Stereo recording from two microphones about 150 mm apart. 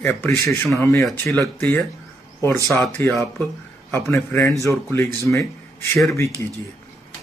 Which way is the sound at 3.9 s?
15° left (ahead or behind).